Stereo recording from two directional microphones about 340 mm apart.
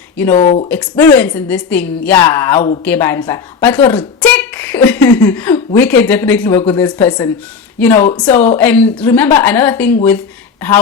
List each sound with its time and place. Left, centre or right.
0.3 s speech: left
0.7 s speech: centre